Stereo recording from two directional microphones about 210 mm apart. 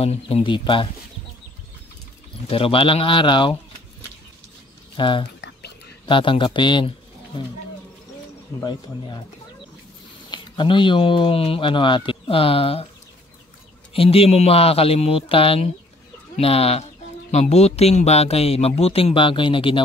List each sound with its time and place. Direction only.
0.0 s speech: 30° left (ahead or behind)
2.5 s speech: 25° left (ahead or behind)
4.9 s speech: 25° left (ahead or behind)
10.3 s speech: 20° left (ahead or behind)
13.9 s speech: 25° left (ahead or behind)